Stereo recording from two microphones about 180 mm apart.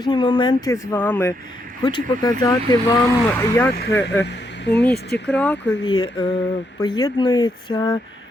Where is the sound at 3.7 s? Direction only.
75° left (ahead or behind).